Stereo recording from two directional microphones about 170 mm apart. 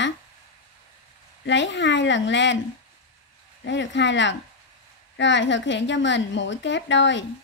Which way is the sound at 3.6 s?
90° left.